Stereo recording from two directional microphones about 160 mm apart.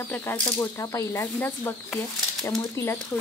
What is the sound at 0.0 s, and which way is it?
Speech, 15° left (ahead or behind).